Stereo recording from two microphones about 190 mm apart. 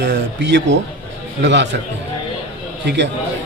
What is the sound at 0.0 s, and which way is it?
A man's voice, 65° right (ahead or behind).